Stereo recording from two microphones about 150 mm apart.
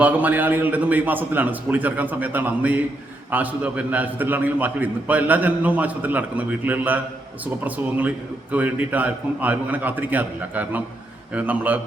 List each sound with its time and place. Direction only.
0.0 s a man's voice: 10° right (ahead or behind)